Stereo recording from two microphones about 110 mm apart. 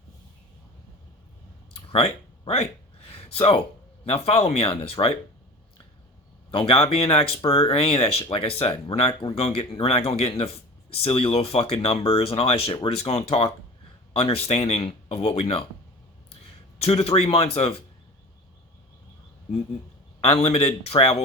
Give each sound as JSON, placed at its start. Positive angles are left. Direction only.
{"t": 1.7, "sound": "a sound", "side_deg": 60}
{"t": 4.1, "sound": "speech", "side_deg": 65}
{"t": 6.5, "sound": "speech", "side_deg": 55}
{"t": 16.8, "sound": "speech", "side_deg": 65}
{"t": 20.2, "sound": "speech", "side_deg": 60}